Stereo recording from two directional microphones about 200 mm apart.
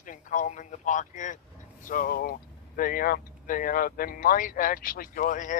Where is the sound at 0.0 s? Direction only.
40° left (ahead or behind).